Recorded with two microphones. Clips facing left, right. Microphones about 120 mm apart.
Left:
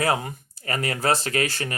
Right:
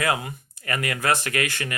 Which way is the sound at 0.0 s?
40° left (ahead or behind).